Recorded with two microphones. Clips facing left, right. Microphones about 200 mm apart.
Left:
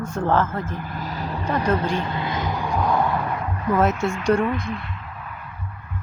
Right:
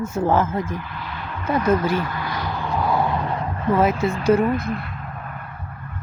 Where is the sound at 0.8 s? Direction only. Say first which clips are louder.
Left 3 dB; 45° left (ahead or behind).